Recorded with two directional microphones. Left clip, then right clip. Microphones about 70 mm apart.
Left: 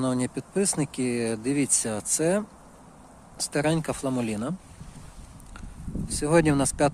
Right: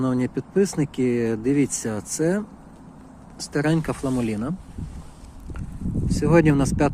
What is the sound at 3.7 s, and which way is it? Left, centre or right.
Speech, left.